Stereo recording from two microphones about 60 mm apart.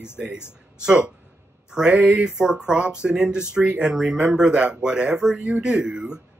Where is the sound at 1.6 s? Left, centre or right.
Centre.